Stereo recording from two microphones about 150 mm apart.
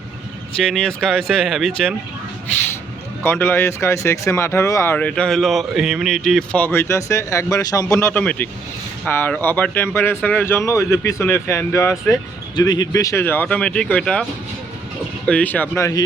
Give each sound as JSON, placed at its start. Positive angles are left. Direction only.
{"t": 0.7, "sound": "speech", "side_deg": 5}
{"t": 3.2, "sound": "speech", "side_deg": 15}
{"t": 15.3, "sound": "speech", "side_deg": 10}